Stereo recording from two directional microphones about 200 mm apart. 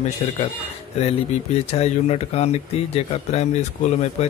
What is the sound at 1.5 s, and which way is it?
Speech, 30° left (ahead or behind).